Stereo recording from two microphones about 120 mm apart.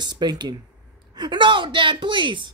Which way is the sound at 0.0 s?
35° right (ahead or behind).